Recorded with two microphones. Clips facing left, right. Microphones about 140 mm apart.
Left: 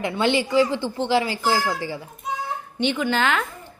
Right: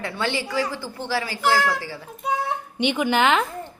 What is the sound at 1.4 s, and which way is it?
Speech, 70° right (ahead or behind).